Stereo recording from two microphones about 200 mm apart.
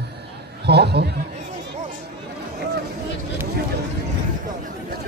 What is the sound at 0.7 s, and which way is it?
Speech, 55° right (ahead or behind).